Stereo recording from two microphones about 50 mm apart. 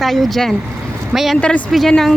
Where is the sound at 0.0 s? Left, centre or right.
Centre.